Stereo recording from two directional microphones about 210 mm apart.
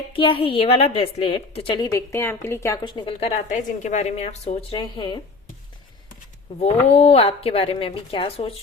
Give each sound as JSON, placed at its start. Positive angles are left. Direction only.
{"t": 0.1, "sound": "a woman's voice", "side_deg": 25}
{"t": 6.6, "sound": "a woman's voice", "side_deg": 30}